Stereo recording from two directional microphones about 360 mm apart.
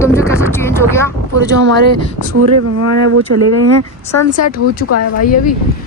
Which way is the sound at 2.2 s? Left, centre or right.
Right.